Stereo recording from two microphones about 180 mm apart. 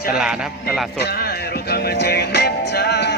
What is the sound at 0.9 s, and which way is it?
Music, 60° left (ahead or behind).